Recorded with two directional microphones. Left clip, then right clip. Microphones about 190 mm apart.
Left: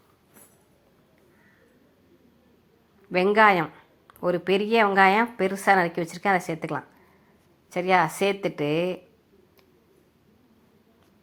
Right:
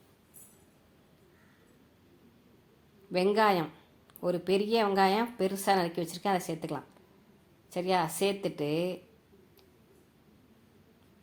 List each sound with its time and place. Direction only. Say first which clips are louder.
3.1 s speech: left 8 dB; 15° left (ahead or behind)